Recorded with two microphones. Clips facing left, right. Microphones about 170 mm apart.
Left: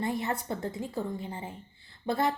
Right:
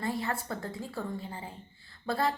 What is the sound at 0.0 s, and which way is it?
A woman's voice, 20° left (ahead or behind).